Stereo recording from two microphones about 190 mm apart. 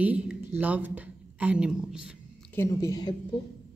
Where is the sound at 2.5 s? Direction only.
15° left (ahead or behind).